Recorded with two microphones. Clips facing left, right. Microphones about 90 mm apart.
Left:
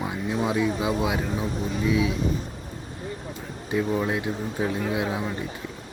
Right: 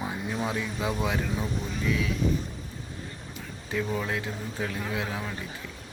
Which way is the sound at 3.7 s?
20° left (ahead or behind).